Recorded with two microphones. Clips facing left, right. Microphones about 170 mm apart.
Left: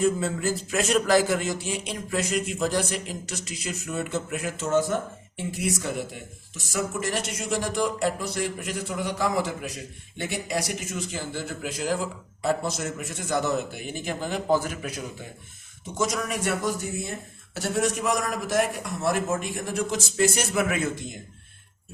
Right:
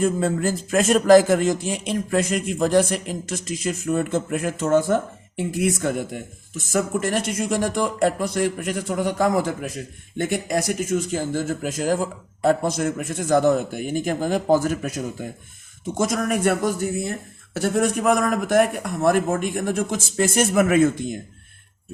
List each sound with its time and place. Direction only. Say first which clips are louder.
0.0 s a man's voice: right 3 dB; 50° right (ahead or behind)